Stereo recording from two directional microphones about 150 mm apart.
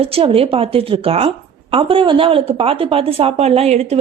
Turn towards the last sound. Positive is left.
turn(degrees=-45)  # may be behind; listen again after turning